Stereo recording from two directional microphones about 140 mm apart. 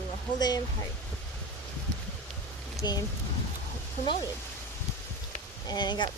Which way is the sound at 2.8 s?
25° left (ahead or behind).